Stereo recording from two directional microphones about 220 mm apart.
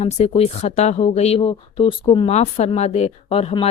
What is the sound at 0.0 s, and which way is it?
Speech, 30° left (ahead or behind).